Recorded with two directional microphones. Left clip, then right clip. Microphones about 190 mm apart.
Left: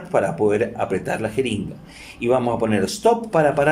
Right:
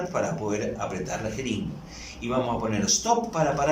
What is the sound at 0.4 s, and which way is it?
A man's voice, 55° left (ahead or behind).